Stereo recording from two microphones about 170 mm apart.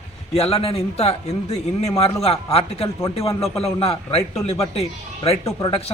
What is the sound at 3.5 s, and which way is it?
A man's voice, 35° left (ahead or behind).